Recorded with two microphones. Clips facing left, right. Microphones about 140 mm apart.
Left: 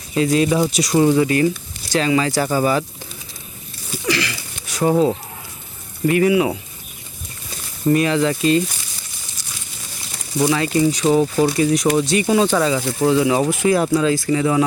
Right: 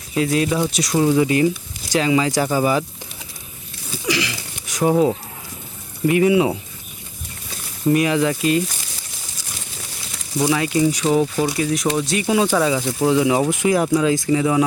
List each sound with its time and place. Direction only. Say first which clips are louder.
0.1 s speech: left 2 dB; centre (ahead or behind)
1.2 s speech: even; 15° right (ahead or behind)
4.0 s sniff: left 1 dB; 15° right (ahead or behind)
6.1 s speech: even; 15° right (ahead or behind)
7.9 s speech: left 1 dB; 10° right (ahead or behind)
10.4 s speech: left 1 dB; 10° right (ahead or behind)
11.0 s speech: left 2 dB; centre (ahead or behind)